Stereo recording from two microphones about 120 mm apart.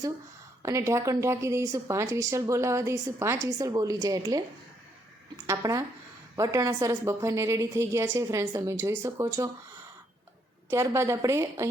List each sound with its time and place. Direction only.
0.6 s a woman's voice: 25° right (ahead or behind)
5.5 s a woman's voice: 30° right (ahead or behind)
10.7 s a woman's voice: 25° right (ahead or behind)